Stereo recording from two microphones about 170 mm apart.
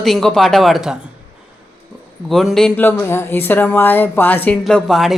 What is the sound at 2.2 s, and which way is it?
Speech, centre (ahead or behind).